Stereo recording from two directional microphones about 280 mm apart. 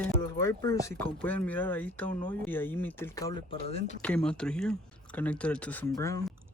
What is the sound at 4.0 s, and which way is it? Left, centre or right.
Speech, centre.